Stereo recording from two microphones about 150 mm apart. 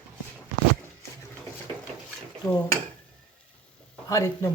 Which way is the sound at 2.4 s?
25° left (ahead or behind).